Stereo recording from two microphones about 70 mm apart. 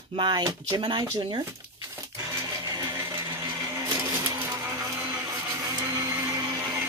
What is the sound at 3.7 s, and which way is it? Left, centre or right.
Printer, right.